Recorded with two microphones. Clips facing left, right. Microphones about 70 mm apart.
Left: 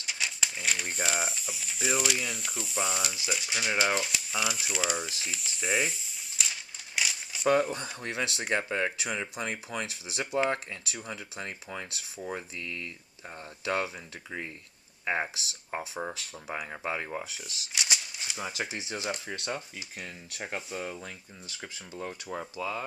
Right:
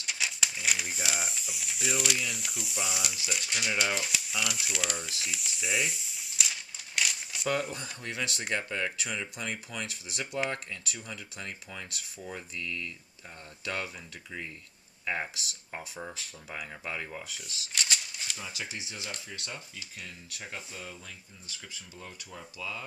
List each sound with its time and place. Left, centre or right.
0.0 s speech: centre
3.8 s typewriter: centre
8.0 s speech: left
17.7 s a sound: centre
18.4 s speech: left